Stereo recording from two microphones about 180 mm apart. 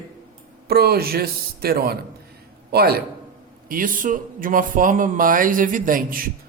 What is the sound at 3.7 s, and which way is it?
Speech, 50° right (ahead or behind).